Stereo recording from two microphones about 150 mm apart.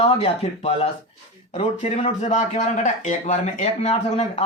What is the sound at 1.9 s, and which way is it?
A man's voice, 50° left (ahead or behind).